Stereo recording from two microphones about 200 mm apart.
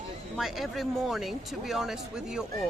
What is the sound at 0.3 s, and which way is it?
Speech, centre (ahead or behind).